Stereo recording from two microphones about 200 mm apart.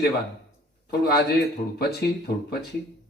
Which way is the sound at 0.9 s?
50° left (ahead or behind).